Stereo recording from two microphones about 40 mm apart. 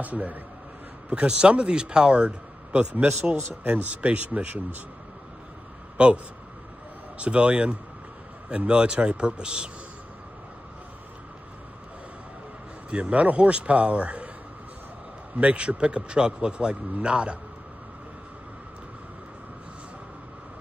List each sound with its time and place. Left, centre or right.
0.0 s speech: right
1.1 s speech: right
6.0 s speech: right
7.2 s speech: right
12.9 s speech: right
15.3 s speech: right